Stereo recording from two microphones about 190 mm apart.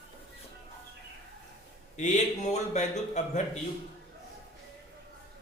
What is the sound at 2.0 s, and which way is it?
A man's voice, 40° left (ahead or behind).